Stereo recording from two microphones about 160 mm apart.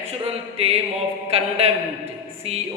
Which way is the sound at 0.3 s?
40° right (ahead or behind).